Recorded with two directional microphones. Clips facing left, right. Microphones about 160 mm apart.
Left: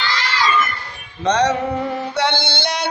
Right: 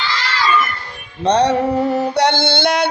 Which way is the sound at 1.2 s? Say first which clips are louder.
Right 3 dB; 35° right (ahead or behind).